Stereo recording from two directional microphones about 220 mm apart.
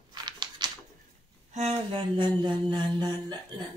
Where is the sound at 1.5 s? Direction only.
30° right (ahead or behind).